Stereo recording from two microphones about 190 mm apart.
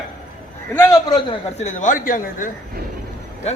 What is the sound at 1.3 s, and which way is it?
A woman's voice, 40° left (ahead or behind).